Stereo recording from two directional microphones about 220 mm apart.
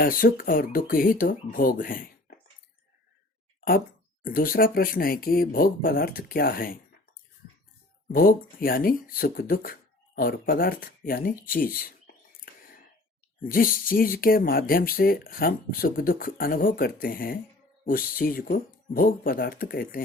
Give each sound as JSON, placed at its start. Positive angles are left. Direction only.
{"t": 0.0, "sound": "speech", "side_deg": 40}
{"t": 4.2, "sound": "speech", "side_deg": 40}
{"t": 8.1, "sound": "speech", "side_deg": 40}